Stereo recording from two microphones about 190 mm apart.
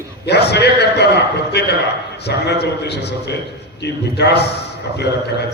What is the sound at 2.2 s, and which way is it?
A man's voice, 60° left (ahead or behind).